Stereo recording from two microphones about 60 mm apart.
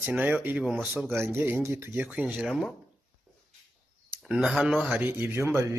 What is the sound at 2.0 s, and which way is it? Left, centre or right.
Speech, right.